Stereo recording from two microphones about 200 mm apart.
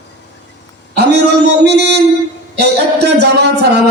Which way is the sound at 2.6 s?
55° right (ahead or behind).